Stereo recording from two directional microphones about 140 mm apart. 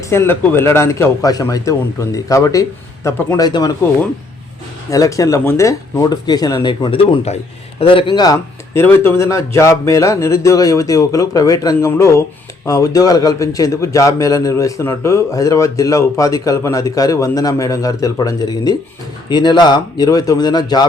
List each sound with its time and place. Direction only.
0.1 s a man's voice: 15° left (ahead or behind)
3.4 s a man's voice: 30° left (ahead or behind)
4.9 s a man's voice: 25° left (ahead or behind)